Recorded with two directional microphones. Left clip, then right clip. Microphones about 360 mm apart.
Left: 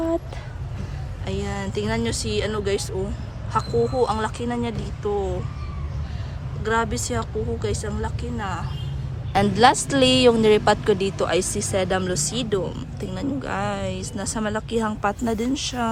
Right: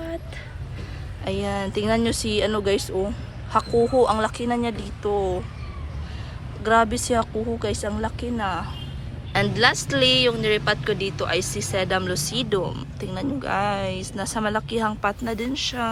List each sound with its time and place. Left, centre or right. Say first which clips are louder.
1.2 s speech: right 3 dB; centre
6.6 s speech: right 4 dB; centre